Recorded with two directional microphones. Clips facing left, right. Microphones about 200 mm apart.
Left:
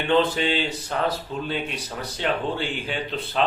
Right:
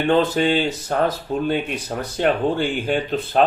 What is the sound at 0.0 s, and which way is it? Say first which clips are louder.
Speech: right 4 dB; 45° right (ahead or behind).